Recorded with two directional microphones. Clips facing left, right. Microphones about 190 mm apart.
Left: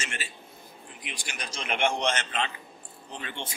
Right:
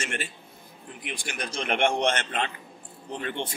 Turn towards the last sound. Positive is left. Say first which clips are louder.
# right 7 dB
turn(degrees=-55)  # may be behind; listen again after turning